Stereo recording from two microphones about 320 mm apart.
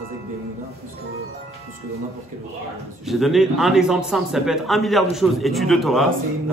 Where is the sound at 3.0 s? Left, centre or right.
Centre.